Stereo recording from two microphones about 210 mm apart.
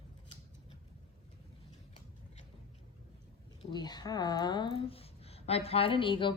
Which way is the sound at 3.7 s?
20° left (ahead or behind).